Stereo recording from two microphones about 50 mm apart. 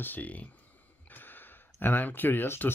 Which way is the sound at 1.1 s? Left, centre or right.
Left.